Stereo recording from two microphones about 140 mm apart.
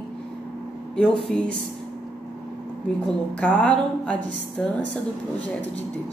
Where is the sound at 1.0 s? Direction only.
5° left (ahead or behind).